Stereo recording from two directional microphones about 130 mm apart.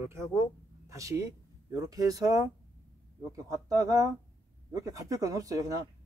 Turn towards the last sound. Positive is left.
turn(degrees=-25)  # may be behind; listen again after turning